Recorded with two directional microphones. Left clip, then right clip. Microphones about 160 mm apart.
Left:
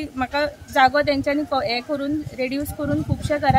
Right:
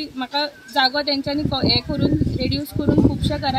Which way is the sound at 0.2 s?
5° left (ahead or behind).